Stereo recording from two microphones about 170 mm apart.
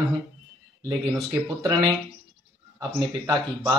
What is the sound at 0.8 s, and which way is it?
A man's voice, 20° right (ahead or behind).